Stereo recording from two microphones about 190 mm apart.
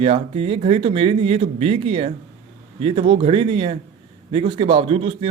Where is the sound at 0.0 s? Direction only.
30° right (ahead or behind).